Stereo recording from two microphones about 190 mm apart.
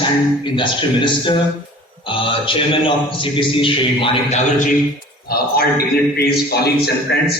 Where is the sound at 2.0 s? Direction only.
25° left (ahead or behind).